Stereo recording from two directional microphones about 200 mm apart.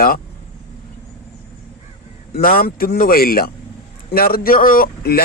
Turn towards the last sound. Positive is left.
turn(degrees=50)  # may be behind; listen again after turning